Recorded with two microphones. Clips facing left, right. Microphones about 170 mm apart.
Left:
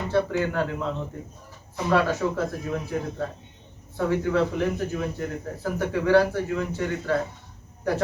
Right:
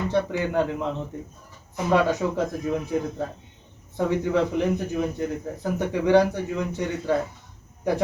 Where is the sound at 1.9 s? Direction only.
20° right (ahead or behind).